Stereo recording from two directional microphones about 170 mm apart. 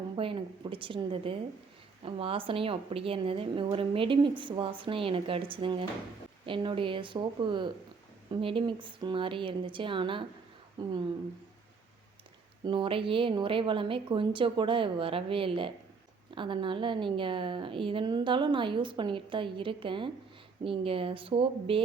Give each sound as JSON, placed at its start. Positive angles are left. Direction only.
{"t": 0.2, "sound": "a woman's voice", "side_deg": -30}
{"t": 12.6, "sound": "a woman's voice", "side_deg": -30}